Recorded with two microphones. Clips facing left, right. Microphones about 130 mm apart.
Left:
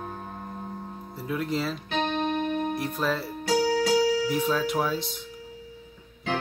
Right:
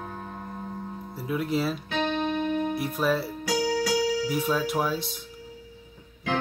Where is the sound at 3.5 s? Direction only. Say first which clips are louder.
Left 3 dB; 50° left (ahead or behind).